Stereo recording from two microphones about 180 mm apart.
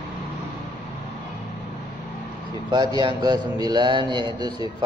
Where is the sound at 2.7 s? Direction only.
20° right (ahead or behind).